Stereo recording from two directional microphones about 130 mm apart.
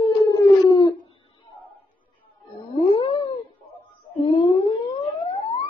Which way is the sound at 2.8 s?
45° left (ahead or behind).